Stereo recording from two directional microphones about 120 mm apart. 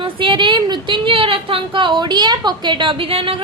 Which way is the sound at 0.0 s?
45° right (ahead or behind).